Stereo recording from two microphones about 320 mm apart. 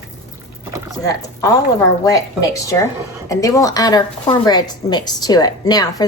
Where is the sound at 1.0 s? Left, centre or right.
Centre.